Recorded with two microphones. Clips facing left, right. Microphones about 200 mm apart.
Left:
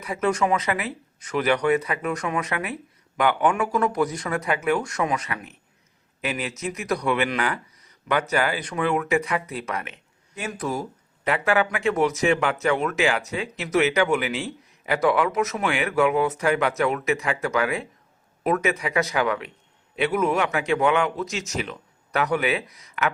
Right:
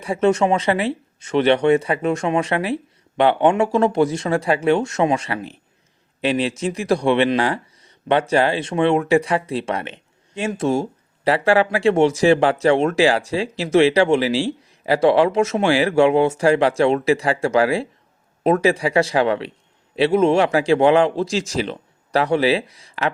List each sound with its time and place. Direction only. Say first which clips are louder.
0.0 s speech: right 6 dB; 30° right (ahead or behind)